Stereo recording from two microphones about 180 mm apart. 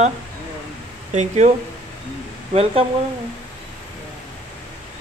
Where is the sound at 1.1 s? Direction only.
40° right (ahead or behind).